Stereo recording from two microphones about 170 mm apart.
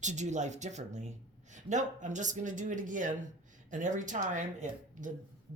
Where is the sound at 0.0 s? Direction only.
45° right (ahead or behind).